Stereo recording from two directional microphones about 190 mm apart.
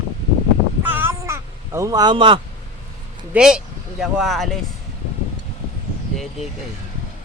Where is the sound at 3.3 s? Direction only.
5° right (ahead or behind).